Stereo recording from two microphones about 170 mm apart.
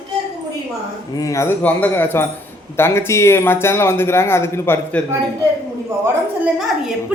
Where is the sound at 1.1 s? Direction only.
20° left (ahead or behind).